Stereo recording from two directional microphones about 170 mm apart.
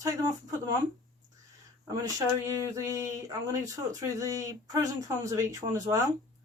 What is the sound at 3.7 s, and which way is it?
Speech, 20° right (ahead or behind).